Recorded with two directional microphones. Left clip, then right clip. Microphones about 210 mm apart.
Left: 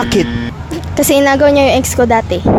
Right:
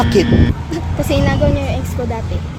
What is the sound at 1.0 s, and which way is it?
A woman's voice, 50° left (ahead or behind).